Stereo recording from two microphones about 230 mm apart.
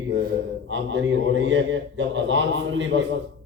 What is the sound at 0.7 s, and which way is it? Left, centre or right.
A man's voice, right.